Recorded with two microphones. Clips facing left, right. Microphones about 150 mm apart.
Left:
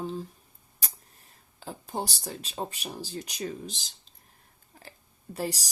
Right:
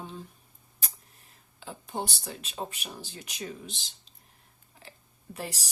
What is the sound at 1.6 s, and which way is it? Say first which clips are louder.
Speech: left 1 dB; 40° left (ahead or behind).